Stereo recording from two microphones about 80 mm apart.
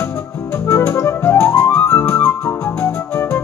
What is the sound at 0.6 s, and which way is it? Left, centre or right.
Music, left.